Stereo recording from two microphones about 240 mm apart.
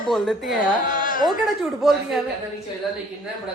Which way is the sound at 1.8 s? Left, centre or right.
Centre.